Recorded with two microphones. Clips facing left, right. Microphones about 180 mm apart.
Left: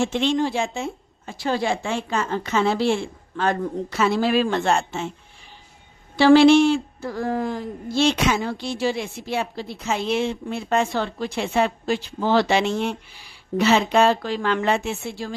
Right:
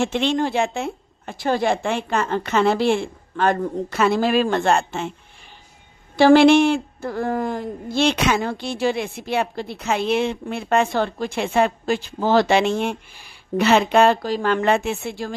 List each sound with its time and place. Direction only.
0.0 s speech: 65° right (ahead or behind)
6.1 s speech: 50° right (ahead or behind)
14.2 s speech: 40° right (ahead or behind); by 15.1 s 55° right (ahead or behind)